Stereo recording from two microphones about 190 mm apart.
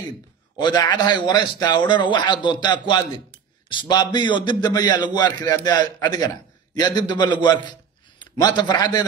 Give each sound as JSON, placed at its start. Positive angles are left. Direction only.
{"t": 0.6, "sound": "a man's voice", "side_deg": 25}